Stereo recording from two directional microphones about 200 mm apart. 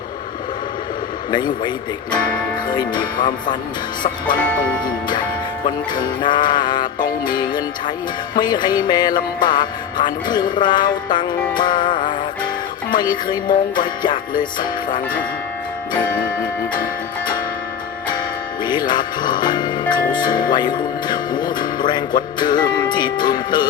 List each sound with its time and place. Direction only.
2.6 s music: 20° left (ahead or behind)
4.4 s speech: 5° left (ahead or behind)
5.6 s music: 20° left (ahead or behind)
18.6 s music: 20° left (ahead or behind)
20.1 s speech: 20° left (ahead or behind)